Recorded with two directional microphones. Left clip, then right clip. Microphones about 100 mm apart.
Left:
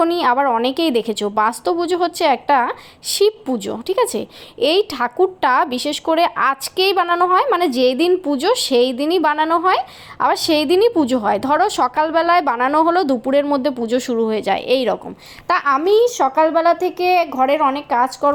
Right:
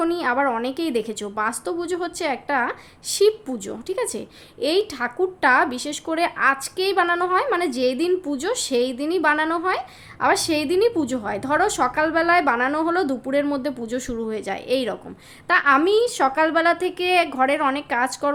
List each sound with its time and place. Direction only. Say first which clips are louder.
0.0 s a woman's voice: left 6 dB; 30° left (ahead or behind)